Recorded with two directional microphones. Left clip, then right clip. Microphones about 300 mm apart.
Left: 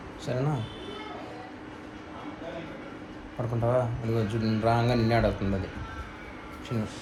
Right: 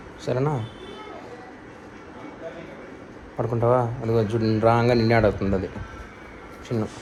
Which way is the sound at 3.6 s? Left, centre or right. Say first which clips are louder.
Right 6 dB; right.